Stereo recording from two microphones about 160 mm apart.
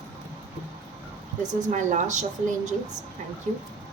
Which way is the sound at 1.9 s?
50° right (ahead or behind).